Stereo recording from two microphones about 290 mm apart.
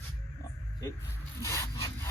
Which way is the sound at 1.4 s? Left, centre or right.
Centre.